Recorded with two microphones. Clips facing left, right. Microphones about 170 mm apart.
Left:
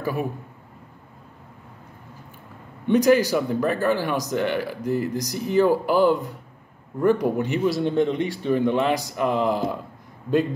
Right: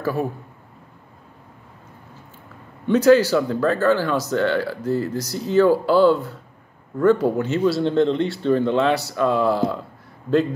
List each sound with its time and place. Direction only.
0.0 s a man's voice: 15° left (ahead or behind)
2.9 s speech: 15° left (ahead or behind)